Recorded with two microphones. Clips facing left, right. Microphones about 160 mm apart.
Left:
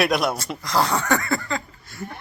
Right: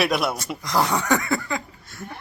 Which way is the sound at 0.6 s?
20° right (ahead or behind).